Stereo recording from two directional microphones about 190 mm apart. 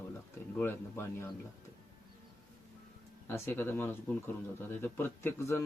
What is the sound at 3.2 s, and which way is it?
A man's voice, 10° left (ahead or behind).